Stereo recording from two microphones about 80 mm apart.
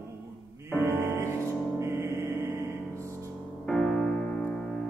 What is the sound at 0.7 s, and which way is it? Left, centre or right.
Music, right.